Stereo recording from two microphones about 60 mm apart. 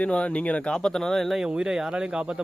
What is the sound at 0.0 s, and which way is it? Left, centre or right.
Speech, centre.